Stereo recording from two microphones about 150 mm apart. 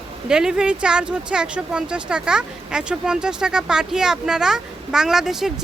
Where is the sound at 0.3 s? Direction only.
5° right (ahead or behind).